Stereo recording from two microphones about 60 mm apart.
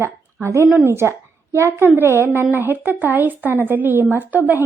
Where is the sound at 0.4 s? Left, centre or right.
Right.